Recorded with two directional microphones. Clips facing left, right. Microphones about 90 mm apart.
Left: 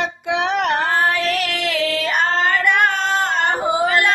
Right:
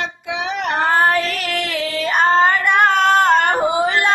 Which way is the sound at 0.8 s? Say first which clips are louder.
Right 3 dB; 55° right (ahead or behind).